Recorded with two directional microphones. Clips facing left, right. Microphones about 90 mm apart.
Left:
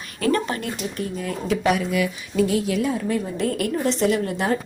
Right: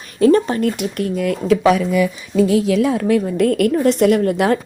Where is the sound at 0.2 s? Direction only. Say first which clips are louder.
Right 9 dB; 30° right (ahead or behind).